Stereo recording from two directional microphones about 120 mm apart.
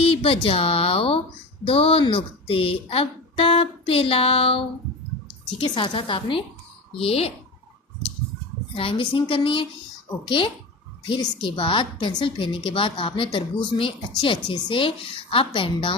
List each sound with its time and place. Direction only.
0.0 s a woman's voice: 50° left (ahead or behind)
8.7 s a woman's voice: 50° left (ahead or behind)